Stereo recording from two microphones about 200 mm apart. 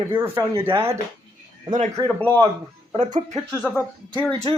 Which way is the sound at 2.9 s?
35° right (ahead or behind).